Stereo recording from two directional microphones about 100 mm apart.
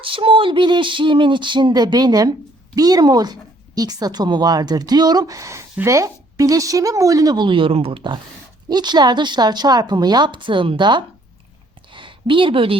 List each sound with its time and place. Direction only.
0.0 s a woman's voice: 60° right (ahead or behind)
8.7 s a woman's voice: 45° right (ahead or behind)
11.9 s a sound: 55° right (ahead or behind)